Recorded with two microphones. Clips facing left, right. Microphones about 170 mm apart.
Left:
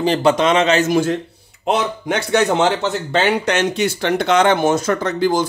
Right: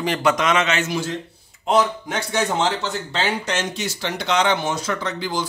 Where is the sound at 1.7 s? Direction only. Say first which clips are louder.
Left 1 dB; 70° left (ahead or behind).